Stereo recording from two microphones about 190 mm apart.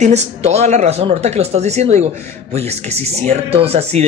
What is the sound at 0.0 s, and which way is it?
Speech, 35° right (ahead or behind).